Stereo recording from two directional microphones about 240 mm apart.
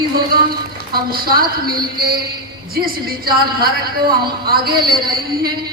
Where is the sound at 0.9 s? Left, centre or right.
Right.